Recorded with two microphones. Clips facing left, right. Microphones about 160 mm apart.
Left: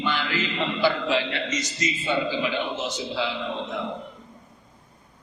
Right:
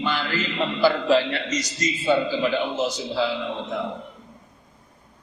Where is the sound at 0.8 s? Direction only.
40° right (ahead or behind).